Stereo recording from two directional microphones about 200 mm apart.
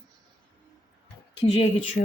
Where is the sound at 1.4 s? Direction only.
30° left (ahead or behind).